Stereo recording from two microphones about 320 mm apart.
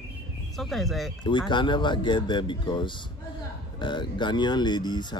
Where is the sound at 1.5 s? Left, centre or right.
Centre.